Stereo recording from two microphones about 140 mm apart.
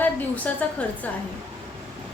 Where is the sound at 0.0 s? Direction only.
10° left (ahead or behind).